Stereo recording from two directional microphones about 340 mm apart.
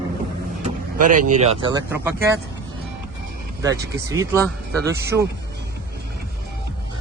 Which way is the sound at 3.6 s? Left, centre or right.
Centre.